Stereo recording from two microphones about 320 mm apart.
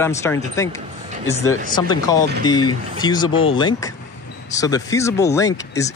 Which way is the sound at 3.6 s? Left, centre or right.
Centre.